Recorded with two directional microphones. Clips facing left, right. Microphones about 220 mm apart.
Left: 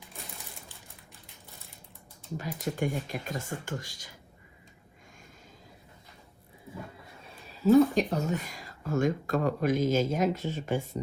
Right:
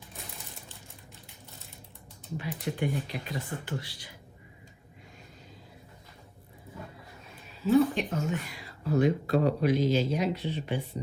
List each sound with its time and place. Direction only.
2.4 s speech: 40° left (ahead or behind)
7.6 s speech: 40° left (ahead or behind)